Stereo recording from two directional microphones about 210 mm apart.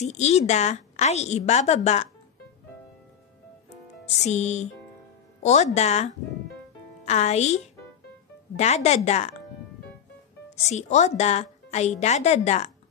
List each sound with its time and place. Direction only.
0.0 s speech: 30° left (ahead or behind)
4.0 s speech: 30° left (ahead or behind)
10.5 s speech: 35° left (ahead or behind)